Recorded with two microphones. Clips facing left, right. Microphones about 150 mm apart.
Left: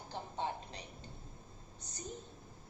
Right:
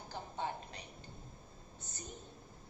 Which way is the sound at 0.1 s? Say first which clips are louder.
Left 1 dB; 25° left (ahead or behind).